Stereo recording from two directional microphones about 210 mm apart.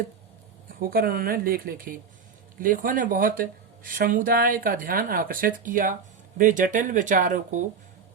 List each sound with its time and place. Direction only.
0.7 s speech: 45° right (ahead or behind)